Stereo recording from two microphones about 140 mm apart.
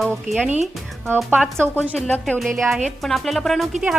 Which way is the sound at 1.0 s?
15° right (ahead or behind).